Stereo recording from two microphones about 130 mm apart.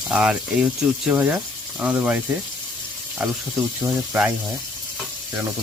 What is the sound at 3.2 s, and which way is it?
Speech, 10° right (ahead or behind).